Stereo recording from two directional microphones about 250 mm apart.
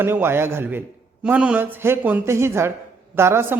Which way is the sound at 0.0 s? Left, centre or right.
Centre.